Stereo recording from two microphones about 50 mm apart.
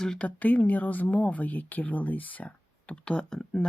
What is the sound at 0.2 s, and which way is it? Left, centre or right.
Speech, left.